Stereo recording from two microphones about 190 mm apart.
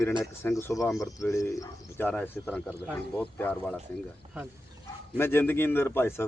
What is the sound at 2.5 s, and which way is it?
Speech, 5° right (ahead or behind).